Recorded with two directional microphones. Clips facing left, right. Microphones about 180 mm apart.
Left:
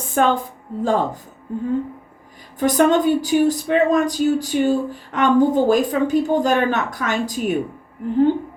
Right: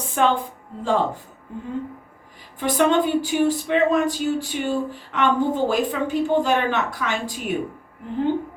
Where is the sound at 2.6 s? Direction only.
45° left (ahead or behind).